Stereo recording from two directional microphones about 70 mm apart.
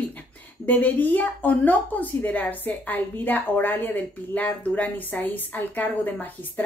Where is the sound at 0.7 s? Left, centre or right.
Left.